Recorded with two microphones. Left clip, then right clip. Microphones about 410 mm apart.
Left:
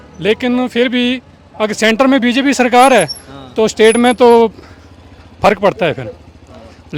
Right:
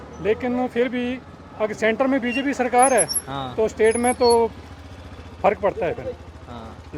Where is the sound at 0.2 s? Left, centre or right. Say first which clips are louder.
Left 8 dB; left.